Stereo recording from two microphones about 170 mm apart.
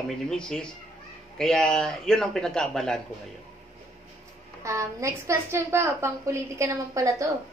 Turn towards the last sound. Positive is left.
turn(degrees=-20)  # may be behind; listen again after turning